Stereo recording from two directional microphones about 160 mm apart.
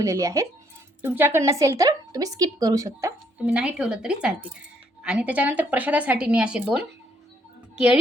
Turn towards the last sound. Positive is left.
turn(degrees=-5)  # may be behind; listen again after turning